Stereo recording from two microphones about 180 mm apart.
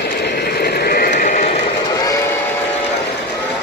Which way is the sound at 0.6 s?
60° left (ahead or behind).